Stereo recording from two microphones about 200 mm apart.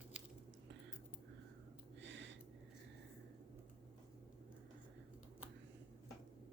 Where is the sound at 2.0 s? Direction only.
65° right (ahead or behind).